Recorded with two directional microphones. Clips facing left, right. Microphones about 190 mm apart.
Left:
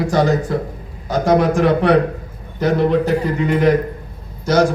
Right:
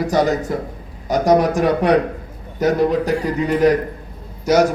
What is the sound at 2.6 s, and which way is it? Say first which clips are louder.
A man's voice: left 1 dB; 40° right (ahead or behind).